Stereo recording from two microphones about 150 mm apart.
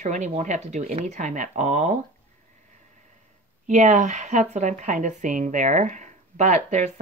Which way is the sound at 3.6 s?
55° right (ahead or behind).